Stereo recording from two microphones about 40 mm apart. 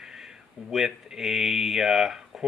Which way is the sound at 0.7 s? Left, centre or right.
Centre.